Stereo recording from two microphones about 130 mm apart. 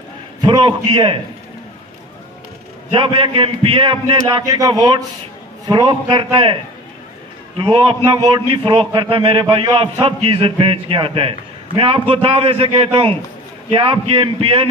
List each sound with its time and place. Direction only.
0.4 s a man's voice: 35° right (ahead or behind)
2.9 s a man's voice: 45° right (ahead or behind)
4.4 s a man's voice: 30° right (ahead or behind); by 14.7 s 45° right (ahead or behind)